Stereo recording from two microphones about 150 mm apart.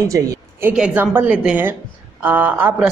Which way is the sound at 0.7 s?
10° right (ahead or behind).